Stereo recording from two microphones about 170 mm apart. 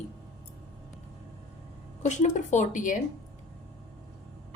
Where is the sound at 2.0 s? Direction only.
45° left (ahead or behind).